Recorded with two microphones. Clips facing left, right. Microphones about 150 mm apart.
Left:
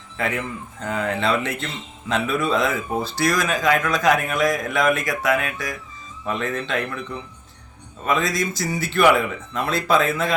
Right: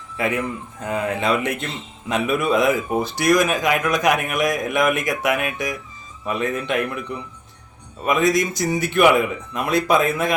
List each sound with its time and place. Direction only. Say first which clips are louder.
0.2 s speech: right 3 dB; 15° right (ahead or behind)
8.0 s speech: right 4 dB; 15° right (ahead or behind)